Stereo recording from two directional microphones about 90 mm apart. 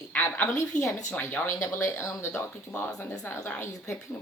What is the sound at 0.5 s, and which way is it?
Speech, 35° left (ahead or behind).